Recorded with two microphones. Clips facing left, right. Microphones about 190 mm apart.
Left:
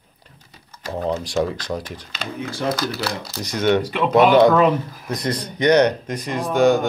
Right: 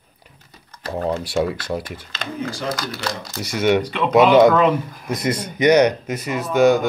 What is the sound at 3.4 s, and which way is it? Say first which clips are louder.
Speech: right 1 dB; 10° right (ahead or behind).